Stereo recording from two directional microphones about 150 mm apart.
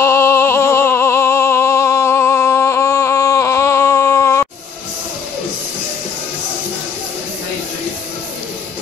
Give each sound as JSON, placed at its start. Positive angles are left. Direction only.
{"t": 0.0, "sound": "music", "side_deg": 15}